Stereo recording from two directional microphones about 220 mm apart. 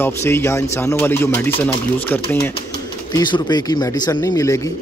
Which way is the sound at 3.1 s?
20° left (ahead or behind).